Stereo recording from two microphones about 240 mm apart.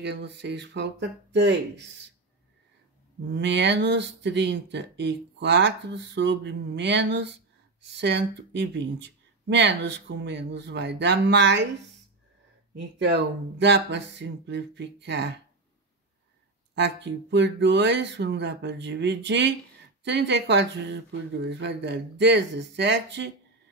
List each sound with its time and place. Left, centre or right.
0.0 s speech: right
3.3 s speech: right
12.7 s speech: right
16.7 s speech: right